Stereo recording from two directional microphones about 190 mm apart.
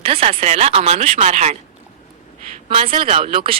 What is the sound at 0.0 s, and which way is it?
Speech, 30° right (ahead or behind).